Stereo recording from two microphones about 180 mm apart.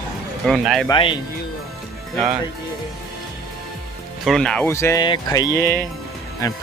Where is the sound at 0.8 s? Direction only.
25° left (ahead or behind).